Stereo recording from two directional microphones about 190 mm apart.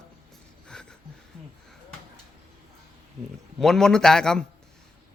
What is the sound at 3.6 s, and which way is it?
Speech, 5° left (ahead or behind).